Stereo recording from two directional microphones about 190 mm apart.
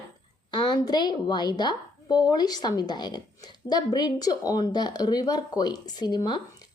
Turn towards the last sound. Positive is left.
turn(degrees=25)  # may be behind; listen again after turning